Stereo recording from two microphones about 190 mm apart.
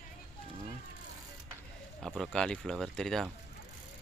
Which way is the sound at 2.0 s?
Centre (ahead or behind).